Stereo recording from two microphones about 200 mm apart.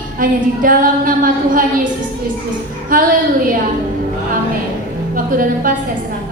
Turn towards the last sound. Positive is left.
turn(degrees=-45)  # may be behind; listen again after turning